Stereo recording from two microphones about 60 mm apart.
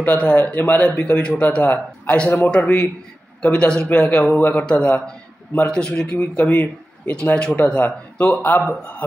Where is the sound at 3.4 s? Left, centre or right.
Centre.